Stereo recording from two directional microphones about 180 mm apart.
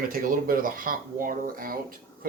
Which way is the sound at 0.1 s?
50° right (ahead or behind).